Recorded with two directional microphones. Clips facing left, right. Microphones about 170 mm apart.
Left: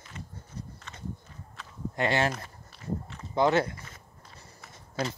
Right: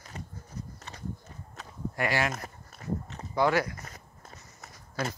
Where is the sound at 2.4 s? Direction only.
40° right (ahead or behind).